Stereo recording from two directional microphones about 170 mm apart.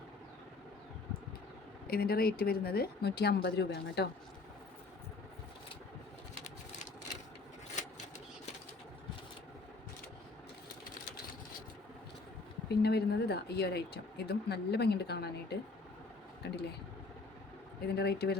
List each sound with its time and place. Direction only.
1.9 s speech: 65° left (ahead or behind)
7.8 s a sound: 45° left (ahead or behind)
12.6 s speech: 75° left (ahead or behind)
17.8 s speech: 70° left (ahead or behind)